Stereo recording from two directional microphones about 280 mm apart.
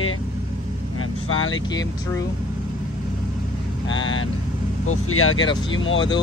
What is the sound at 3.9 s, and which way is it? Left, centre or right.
Speech, left.